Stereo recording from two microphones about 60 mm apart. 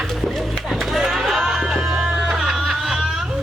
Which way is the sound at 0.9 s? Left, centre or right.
Centre.